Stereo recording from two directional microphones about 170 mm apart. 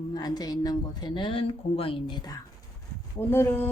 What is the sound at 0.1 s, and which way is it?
Speech, 25° left (ahead or behind).